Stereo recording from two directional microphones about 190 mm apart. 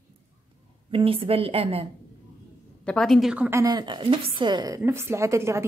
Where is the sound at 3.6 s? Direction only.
20° right (ahead or behind).